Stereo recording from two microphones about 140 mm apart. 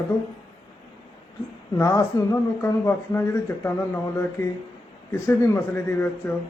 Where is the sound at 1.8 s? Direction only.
25° left (ahead or behind).